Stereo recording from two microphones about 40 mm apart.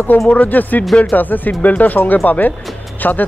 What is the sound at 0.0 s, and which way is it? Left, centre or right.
Speech, left.